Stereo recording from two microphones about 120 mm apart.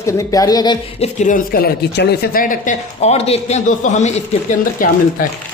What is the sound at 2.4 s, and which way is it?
Speech, 80° left.